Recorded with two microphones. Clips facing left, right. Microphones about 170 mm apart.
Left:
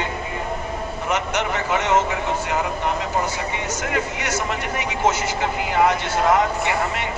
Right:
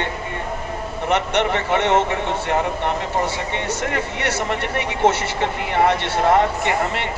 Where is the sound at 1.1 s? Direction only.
60° right (ahead or behind).